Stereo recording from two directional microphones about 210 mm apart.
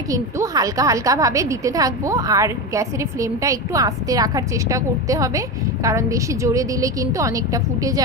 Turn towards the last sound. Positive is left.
turn(degrees=-15)  # may be behind; listen again after turning